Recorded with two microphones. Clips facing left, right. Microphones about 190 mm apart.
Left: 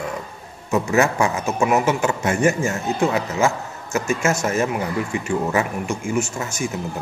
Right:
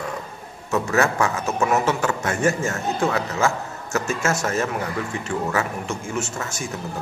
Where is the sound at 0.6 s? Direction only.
15° left (ahead or behind).